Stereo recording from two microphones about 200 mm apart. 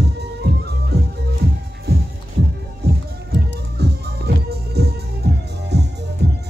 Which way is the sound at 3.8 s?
55° right (ahead or behind).